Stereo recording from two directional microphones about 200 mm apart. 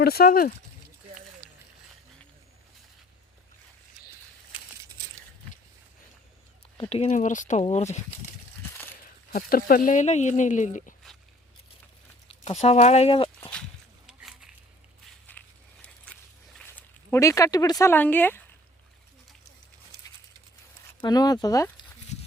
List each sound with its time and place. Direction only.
0.0 s speech: 50° left (ahead or behind)
6.7 s speech: 25° left (ahead or behind)
8.7 s crumpling: 10° left (ahead or behind)
9.3 s speech: 45° left (ahead or behind)
12.3 s speech: 30° left (ahead or behind)
14.1 s a sound: 5° right (ahead or behind)
15.3 s a sound: 10° left (ahead or behind)
16.6 s speech: 10° left (ahead or behind)
21.0 s speech: 20° left (ahead or behind)